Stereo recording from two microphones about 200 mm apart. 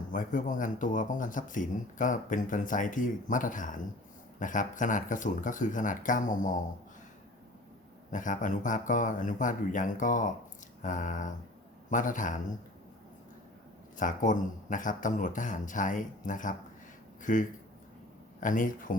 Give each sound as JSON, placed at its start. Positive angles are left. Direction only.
{"t": 0.1, "sound": "speech", "side_deg": 40}
{"t": 8.1, "sound": "speech", "side_deg": 40}
{"t": 14.0, "sound": "speech", "side_deg": 40}